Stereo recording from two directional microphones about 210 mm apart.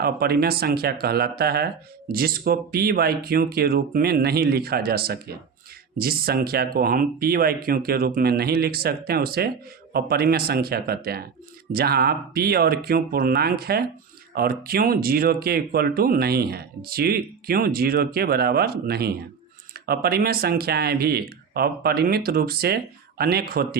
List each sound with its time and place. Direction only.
0.0 s speech: 45° right (ahead or behind)